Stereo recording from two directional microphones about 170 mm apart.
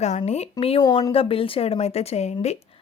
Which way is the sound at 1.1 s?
35° left (ahead or behind).